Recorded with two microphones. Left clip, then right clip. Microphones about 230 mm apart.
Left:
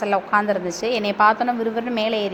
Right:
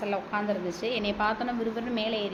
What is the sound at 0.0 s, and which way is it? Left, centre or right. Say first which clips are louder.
A woman's voice: left 11 dB; centre.